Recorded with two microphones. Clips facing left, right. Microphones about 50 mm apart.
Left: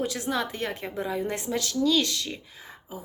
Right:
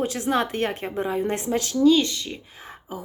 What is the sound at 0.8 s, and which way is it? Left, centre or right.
A woman's voice, right.